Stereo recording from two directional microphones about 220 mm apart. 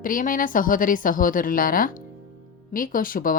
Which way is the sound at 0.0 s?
40° left (ahead or behind).